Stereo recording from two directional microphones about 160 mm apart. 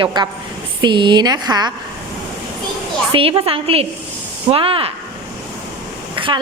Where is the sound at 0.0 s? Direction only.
30° right (ahead or behind).